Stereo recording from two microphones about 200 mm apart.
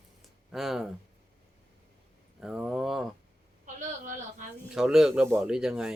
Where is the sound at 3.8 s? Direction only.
40° right (ahead or behind).